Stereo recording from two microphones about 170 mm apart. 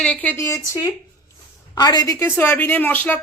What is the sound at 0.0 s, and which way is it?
Speech, 10° left (ahead or behind).